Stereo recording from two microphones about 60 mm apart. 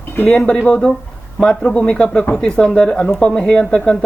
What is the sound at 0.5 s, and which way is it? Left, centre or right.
Speech, centre.